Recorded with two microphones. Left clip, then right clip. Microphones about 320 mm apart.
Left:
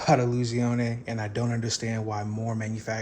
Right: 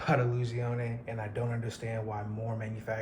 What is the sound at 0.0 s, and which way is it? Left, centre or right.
A man's voice, centre.